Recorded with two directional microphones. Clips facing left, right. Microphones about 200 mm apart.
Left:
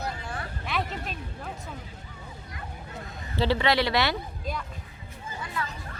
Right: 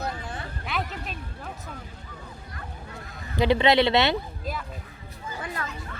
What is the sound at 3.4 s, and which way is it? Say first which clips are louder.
Speech: right 4 dB; 20° right (ahead or behind).